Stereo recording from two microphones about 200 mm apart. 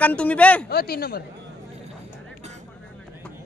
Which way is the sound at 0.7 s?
50° left (ahead or behind).